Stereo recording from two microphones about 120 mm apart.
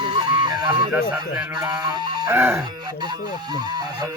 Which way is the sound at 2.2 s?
20° right (ahead or behind).